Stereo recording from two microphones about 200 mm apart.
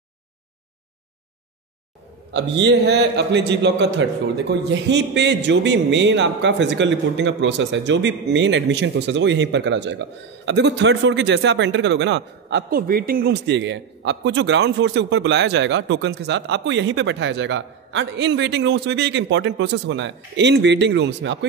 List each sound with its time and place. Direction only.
2.3 s a man's voice: 60° right (ahead or behind)